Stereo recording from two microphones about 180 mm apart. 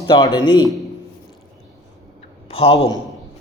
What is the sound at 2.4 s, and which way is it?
Speech, 30° left (ahead or behind).